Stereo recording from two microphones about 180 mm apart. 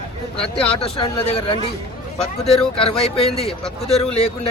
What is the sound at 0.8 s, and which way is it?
Speech, 30° left (ahead or behind).